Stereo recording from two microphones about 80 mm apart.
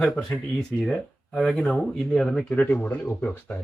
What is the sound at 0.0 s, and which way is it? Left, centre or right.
Speech, centre.